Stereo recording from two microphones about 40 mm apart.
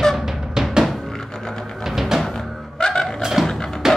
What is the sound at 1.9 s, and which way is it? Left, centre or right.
Music, centre.